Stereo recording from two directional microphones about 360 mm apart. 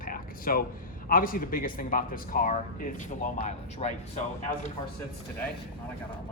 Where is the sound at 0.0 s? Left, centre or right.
Left.